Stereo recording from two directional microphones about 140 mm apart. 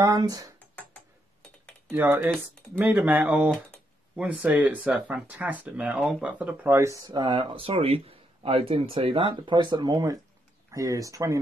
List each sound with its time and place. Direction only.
0.0 s speech: 25° right (ahead or behind)
1.9 s speech: 15° right (ahead or behind)
5.9 s speech: centre (ahead or behind)
6.2 s speech: 10° right (ahead or behind)